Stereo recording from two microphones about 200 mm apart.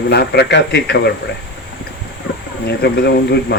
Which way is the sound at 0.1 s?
55° left (ahead or behind).